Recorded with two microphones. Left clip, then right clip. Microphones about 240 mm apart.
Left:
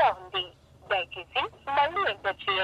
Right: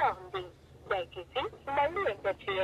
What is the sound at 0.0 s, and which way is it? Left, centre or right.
Telephone, centre.